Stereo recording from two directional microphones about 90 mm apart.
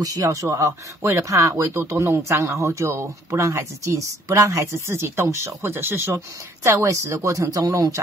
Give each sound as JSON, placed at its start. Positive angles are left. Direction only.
{"t": 0.0, "sound": "speech", "side_deg": -45}